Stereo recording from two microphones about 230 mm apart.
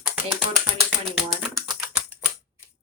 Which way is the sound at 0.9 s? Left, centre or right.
Centre.